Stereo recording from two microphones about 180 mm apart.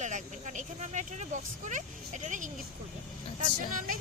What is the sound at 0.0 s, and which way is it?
Speech, 45° right (ahead or behind).